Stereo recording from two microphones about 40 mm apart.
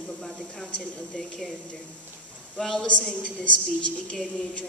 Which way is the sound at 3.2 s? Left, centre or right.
Left.